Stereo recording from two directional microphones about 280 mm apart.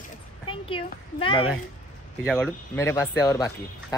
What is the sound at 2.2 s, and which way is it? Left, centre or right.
Speech, centre.